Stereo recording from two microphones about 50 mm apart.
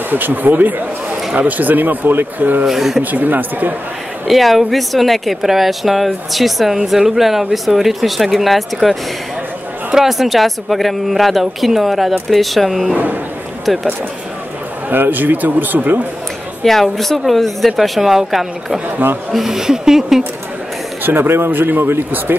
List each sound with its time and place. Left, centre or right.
0.1 s a man's voice: right
2.6 s speech: centre
3.0 s a man's voice: right
4.3 s speech: centre
9.9 s speech: centre
12.9 s a sound: right
13.7 s speech: centre
14.9 s a man's voice: right
16.6 s speech: centre
21.0 s a man's voice: right